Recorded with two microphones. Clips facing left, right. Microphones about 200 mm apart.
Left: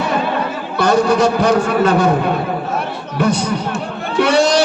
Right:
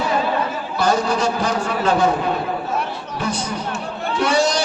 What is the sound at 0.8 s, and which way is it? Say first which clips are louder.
A man's voice: left 6 dB; 65° left (ahead or behind).